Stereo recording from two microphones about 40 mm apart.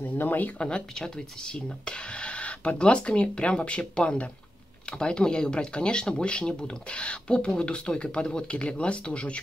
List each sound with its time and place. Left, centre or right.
0.2 s speech: left
0.6 s speech: left